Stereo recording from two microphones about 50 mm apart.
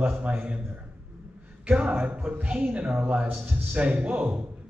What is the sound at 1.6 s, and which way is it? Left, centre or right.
Speech, right.